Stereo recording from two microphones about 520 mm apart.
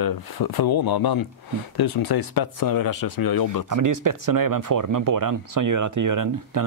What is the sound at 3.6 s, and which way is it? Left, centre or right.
Speech, right.